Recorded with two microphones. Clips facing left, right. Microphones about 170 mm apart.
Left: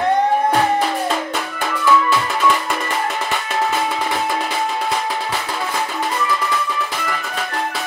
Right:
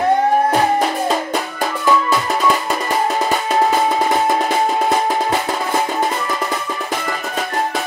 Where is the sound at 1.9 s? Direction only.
40° right (ahead or behind).